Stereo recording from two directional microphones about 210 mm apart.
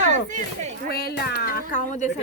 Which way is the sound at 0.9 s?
45° left (ahead or behind).